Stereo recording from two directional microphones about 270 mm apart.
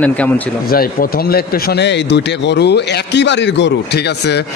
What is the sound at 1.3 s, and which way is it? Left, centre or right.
A man's voice, left.